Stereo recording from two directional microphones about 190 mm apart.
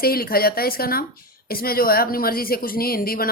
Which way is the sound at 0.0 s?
50° left (ahead or behind).